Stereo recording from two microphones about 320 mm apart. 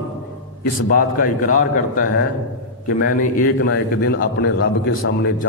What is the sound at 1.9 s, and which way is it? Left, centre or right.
Speech, left.